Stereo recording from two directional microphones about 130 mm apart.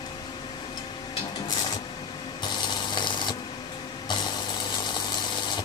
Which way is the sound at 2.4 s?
35° left (ahead or behind).